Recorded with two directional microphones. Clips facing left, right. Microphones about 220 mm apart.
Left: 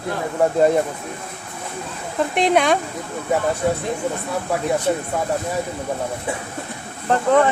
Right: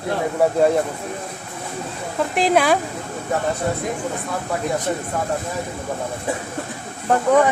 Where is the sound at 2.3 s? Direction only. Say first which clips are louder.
Even; centre (ahead or behind).